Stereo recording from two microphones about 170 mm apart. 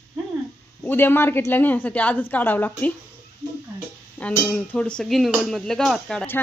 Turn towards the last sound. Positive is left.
turn(degrees=10)  # may be behind; listen again after turning